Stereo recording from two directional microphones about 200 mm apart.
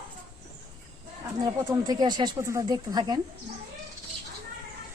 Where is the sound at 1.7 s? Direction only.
20° right (ahead or behind).